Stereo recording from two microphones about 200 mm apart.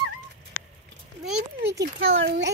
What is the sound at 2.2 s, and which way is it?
Speech, 60° right (ahead or behind).